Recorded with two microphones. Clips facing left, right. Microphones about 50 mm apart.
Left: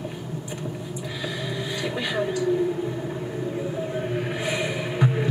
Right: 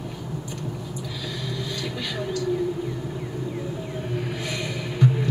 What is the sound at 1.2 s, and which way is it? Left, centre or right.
Vehicle, centre.